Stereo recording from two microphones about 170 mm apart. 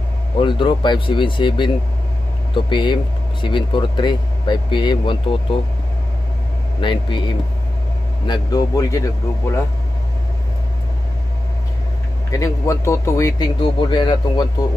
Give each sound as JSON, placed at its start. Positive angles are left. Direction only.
{"t": 0.4, "sound": "speech", "side_deg": 30}
{"t": 6.8, "sound": "speech", "side_deg": 30}
{"t": 12.3, "sound": "speech", "side_deg": 20}